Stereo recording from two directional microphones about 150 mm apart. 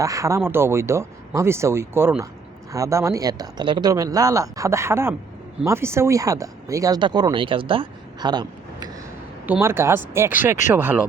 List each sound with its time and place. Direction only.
0.0 s speech: 20° right (ahead or behind)
9.5 s speech: 15° right (ahead or behind)